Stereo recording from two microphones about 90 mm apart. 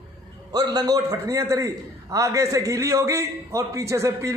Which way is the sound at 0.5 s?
45° right (ahead or behind).